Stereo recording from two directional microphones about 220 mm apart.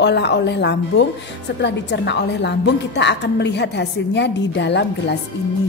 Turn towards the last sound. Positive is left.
turn(degrees=50)  # may be behind; listen again after turning